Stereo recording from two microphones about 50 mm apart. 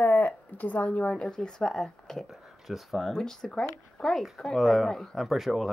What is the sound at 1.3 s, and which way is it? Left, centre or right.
Speech, centre.